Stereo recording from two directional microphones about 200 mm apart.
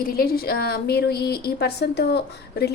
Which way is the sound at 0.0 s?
50° left (ahead or behind).